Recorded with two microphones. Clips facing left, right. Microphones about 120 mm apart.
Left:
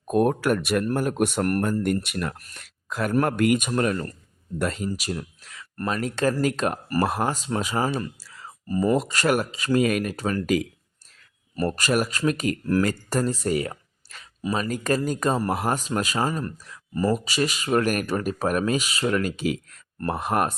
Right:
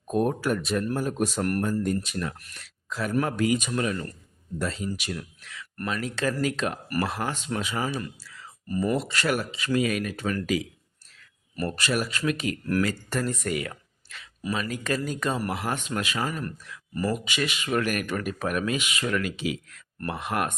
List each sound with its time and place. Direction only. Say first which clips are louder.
0.1 s speech: left 4 dB; 70° left (ahead or behind)
1.6 s speech: left 2 dB; 65° left (ahead or behind)
2.4 s speech: left 1 dB; 45° left (ahead or behind)
3.7 s speech: left 4 dB; 45° left (ahead or behind)
4.9 s speech: left 3 dB; 35° left (ahead or behind)
6.8 s speech: left 6 dB; 30° left (ahead or behind)
7.1 s speech: left 4 dB; 45° left (ahead or behind)